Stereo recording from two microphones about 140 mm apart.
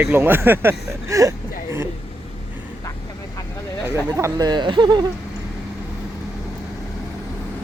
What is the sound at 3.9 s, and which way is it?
Speech, 20° right (ahead or behind).